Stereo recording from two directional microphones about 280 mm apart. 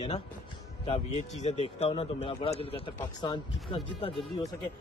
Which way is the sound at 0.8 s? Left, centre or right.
Left.